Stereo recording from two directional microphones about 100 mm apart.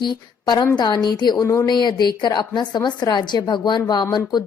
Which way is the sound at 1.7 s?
45° left (ahead or behind).